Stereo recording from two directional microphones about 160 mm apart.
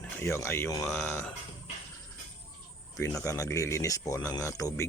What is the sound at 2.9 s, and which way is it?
Speech, 20° left (ahead or behind).